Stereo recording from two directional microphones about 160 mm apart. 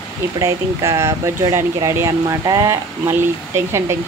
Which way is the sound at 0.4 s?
20° right (ahead or behind).